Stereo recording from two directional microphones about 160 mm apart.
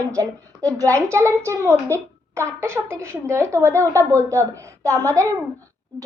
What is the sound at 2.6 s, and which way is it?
A woman's voice, 15° right (ahead or behind).